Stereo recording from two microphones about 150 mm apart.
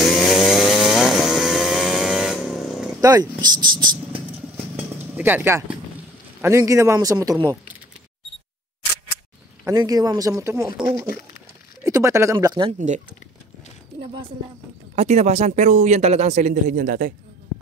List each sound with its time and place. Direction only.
0.0 s chainsaw: centre (ahead or behind)
3.0 s a man's voice: 25° right (ahead or behind)
4.7 s a sound: 10° right (ahead or behind)
6.4 s a man's voice: 20° right (ahead or behind)
9.7 s a man's voice: 25° right (ahead or behind)
11.8 s a man's voice: 20° right (ahead or behind)
15.0 s speech: 45° right (ahead or behind)